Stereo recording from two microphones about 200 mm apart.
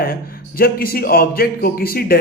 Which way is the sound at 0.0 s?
50° left (ahead or behind).